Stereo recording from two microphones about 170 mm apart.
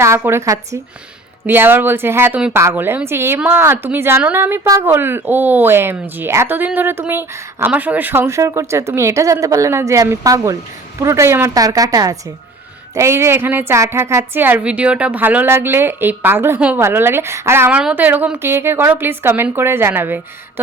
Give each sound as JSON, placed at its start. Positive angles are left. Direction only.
{"t": 0.2, "sound": "a woman's voice", "side_deg": -15}